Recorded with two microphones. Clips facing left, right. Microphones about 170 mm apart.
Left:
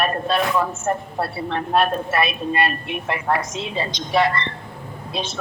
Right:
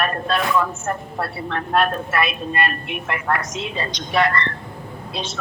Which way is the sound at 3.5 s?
20° right (ahead or behind).